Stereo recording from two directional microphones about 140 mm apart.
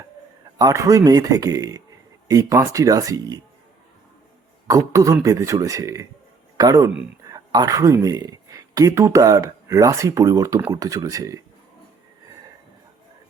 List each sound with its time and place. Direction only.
0.6 s speech: 25° right (ahead or behind)
4.7 s speech: 25° right (ahead or behind)